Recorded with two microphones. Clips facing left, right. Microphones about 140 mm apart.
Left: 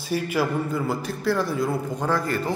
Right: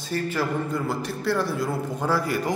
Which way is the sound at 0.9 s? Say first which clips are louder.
Left 1 dB; centre (ahead or behind).